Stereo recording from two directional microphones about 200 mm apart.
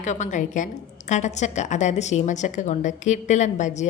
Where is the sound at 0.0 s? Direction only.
35° left (ahead or behind).